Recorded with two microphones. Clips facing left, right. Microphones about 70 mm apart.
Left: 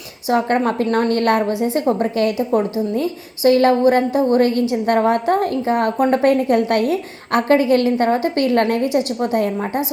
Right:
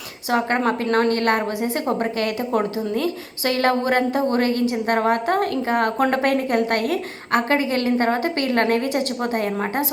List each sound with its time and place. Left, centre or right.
0.3 s a woman's voice: right
6.1 s a woman's voice: right
6.5 s a woman's voice: right